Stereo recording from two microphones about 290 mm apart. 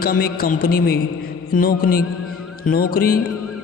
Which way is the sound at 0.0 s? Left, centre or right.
Left.